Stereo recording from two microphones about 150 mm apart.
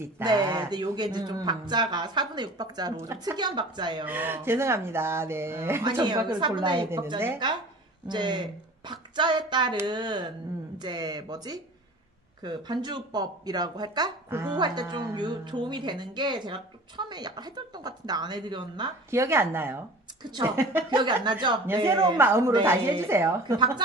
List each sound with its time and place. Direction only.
0.2 s speech: 30° right (ahead or behind)
4.0 s speech: 15° right (ahead or behind)
5.9 s a woman's voice: 30° right (ahead or behind)
8.1 s a woman's voice: 30° right (ahead or behind)
19.0 s speech: 15° right (ahead or behind)
20.9 s a woman's voice: 30° right (ahead or behind)
21.7 s speech: 20° right (ahead or behind)
23.4 s speech: 30° right (ahead or behind)